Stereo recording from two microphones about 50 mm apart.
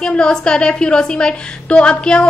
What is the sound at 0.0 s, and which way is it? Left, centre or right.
A woman's voice, centre.